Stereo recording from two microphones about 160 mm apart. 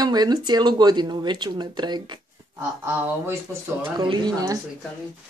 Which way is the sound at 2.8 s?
15° right (ahead or behind).